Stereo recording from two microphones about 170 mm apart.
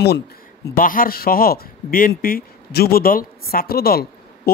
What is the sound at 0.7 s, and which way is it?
Speech, 55° left (ahead or behind).